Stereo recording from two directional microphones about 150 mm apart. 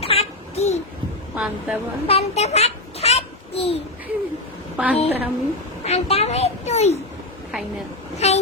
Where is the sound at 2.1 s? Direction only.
45° left (ahead or behind).